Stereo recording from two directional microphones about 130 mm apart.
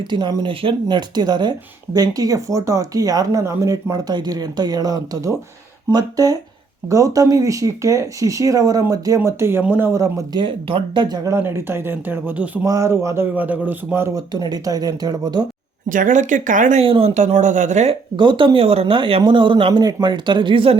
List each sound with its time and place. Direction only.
0.0 s speech: 35° right (ahead or behind)
10.4 s speech: 40° right (ahead or behind)
11.3 s speech: 20° right (ahead or behind)
12.6 s speech: 25° right (ahead or behind)
14.3 s speech: 30° right (ahead or behind)
15.9 s speech: 85° right
16.8 s speech: 45° right (ahead or behind)
17.2 s speech: 65° right (ahead or behind)
18.2 s speech: 40° right (ahead or behind)